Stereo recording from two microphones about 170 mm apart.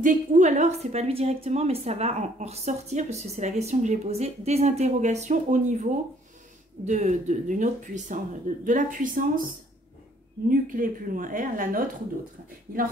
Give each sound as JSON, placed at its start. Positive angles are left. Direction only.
{"t": 0.0, "sound": "a woman's voice", "side_deg": -50}
{"t": 10.5, "sound": "a woman's voice", "side_deg": -55}